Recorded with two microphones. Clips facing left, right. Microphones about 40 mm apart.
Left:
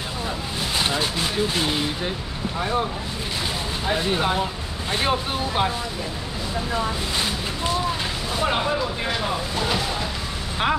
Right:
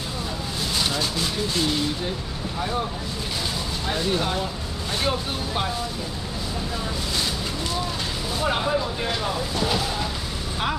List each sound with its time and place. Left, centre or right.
0.7 s speech: left
3.8 s speech: left
8.4 s speech: centre